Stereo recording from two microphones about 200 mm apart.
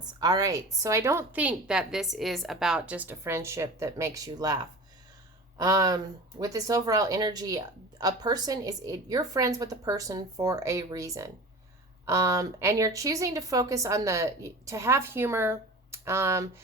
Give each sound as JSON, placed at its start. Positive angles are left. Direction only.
{"t": 0.0, "sound": "speech", "side_deg": -20}